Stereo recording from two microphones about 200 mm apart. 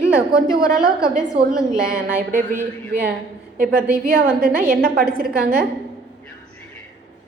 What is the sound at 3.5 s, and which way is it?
A woman's voice, 45° right (ahead or behind).